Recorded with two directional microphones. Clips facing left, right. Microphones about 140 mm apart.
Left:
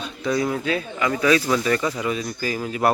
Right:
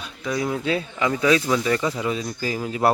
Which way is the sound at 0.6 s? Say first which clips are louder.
Even; 25° right (ahead or behind).